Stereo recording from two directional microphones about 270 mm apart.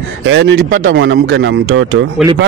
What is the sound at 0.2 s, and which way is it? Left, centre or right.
Speech, right.